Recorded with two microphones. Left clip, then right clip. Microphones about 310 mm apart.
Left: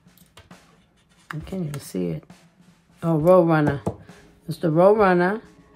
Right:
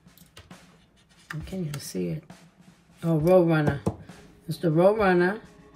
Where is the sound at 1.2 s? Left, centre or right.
Centre.